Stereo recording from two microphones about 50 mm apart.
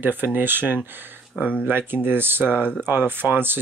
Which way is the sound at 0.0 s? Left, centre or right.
Right.